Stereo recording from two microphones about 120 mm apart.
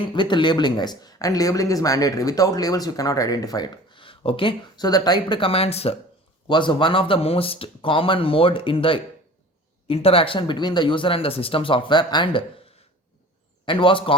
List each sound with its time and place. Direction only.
0.1 s speech: 40° left (ahead or behind); by 6.0 s 55° left (ahead or behind)
6.5 s speech: 40° left (ahead or behind)
13.7 s speech: 45° left (ahead or behind)